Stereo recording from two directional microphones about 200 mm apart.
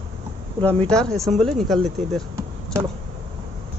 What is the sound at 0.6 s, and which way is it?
Speech, 5° left (ahead or behind).